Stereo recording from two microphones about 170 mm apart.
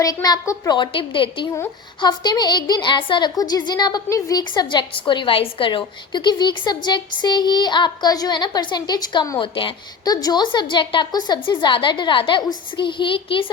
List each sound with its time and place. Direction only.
0.0 s a woman's voice: 20° left (ahead or behind)